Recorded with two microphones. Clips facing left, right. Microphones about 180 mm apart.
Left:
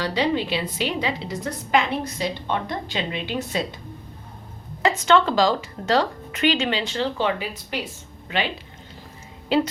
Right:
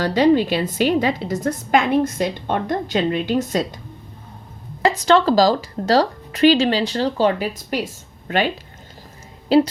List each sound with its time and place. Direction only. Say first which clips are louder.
0.0 s a woman's voice: right 8 dB; 45° right (ahead or behind)
4.8 s a woman's voice: right 3 dB; 35° right (ahead or behind)
9.5 s a woman's voice: right 6 dB; 35° right (ahead or behind)